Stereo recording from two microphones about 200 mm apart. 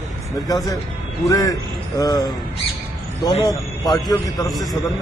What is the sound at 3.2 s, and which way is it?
A man's voice, 20° left (ahead or behind).